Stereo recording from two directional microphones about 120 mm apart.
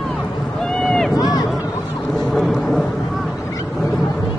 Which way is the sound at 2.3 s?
Centre (ahead or behind).